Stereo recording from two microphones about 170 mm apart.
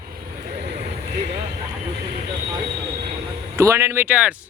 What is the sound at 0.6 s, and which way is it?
Vehicle, 75° right (ahead or behind).